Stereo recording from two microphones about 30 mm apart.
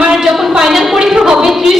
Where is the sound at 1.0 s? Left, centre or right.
Centre.